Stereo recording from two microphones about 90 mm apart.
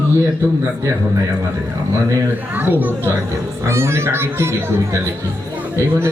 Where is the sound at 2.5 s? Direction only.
20° right (ahead or behind).